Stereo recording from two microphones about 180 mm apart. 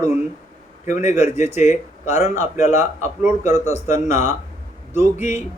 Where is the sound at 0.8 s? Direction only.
45° left (ahead or behind).